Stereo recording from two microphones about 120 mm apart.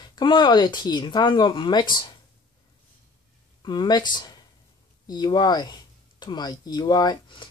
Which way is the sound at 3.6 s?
35° left (ahead or behind).